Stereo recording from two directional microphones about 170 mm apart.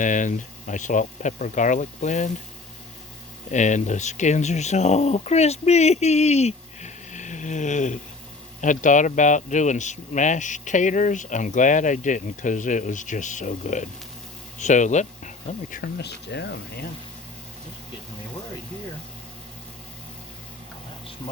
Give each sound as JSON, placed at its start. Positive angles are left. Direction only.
{"t": 0.0, "sound": "speech", "side_deg": 50}
{"t": 3.5, "sound": "speech", "side_deg": 45}
{"t": 15.7, "sound": "speech", "side_deg": 70}